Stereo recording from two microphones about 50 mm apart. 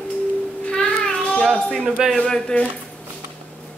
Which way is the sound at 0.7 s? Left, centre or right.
Centre.